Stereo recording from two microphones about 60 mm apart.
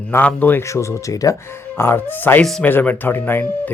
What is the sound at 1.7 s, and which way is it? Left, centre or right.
Speech, left.